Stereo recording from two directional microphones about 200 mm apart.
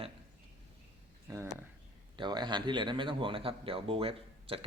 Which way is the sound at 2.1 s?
20° right (ahead or behind).